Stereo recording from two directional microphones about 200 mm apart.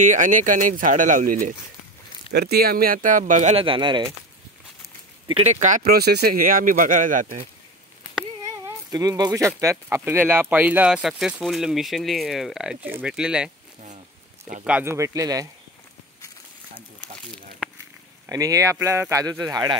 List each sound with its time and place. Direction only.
0.0 s speech: 40° right (ahead or behind)
2.3 s speech: 50° right (ahead or behind); by 4.1 s 25° right (ahead or behind)
5.3 s speech: 35° right (ahead or behind)
5.8 s speech: 55° right (ahead or behind)
8.6 s speech: 20° right (ahead or behind)
14.6 s speech: 5° right (ahead or behind)
17.6 s purr: 5° right (ahead or behind)
18.3 s speech: 15° right (ahead or behind)